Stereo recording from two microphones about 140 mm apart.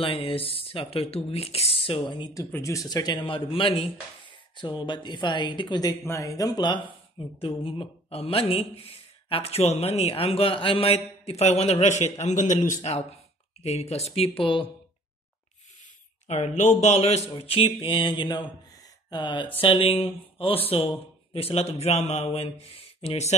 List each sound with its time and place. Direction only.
0.0 s speech: 40° left (ahead or behind)
16.3 s speech: 55° left (ahead or behind)
17.4 s speech: 40° left (ahead or behind)